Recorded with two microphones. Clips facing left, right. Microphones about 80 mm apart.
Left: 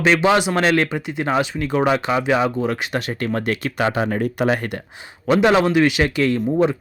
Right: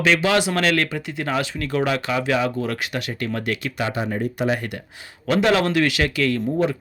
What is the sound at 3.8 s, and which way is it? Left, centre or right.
Speech, left.